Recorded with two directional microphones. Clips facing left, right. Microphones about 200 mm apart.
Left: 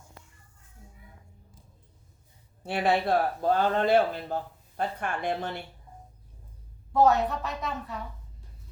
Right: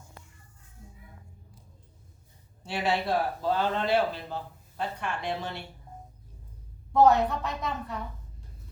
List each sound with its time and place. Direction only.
2.6 s speech: 55° left (ahead or behind)
7.0 s a woman's voice: centre (ahead or behind)